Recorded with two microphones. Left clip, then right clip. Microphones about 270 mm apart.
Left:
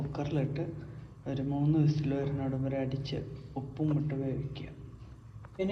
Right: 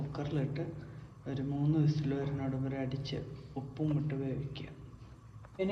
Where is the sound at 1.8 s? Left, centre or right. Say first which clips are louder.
Left 3 dB; centre.